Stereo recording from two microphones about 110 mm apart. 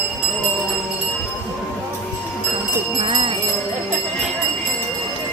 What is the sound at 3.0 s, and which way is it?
Jingle bell, 50° right (ahead or behind).